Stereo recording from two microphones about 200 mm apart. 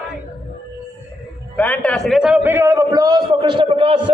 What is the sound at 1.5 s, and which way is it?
A man's voice, 5° left (ahead or behind).